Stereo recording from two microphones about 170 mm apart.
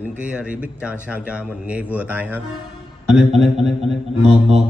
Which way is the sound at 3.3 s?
40° right (ahead or behind).